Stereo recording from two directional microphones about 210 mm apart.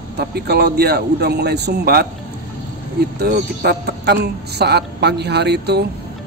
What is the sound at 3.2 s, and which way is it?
Speech, 50° right (ahead or behind).